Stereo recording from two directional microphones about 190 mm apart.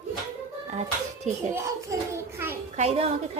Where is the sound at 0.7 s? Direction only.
35° right (ahead or behind).